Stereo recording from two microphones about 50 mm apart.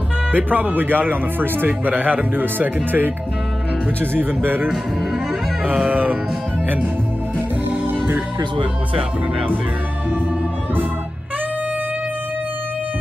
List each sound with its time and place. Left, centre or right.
0.3 s speech: right
5.9 s music: right
7.3 s music: right